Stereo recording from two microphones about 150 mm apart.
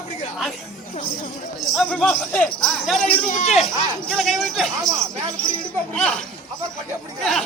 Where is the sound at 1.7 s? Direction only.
5° left (ahead or behind).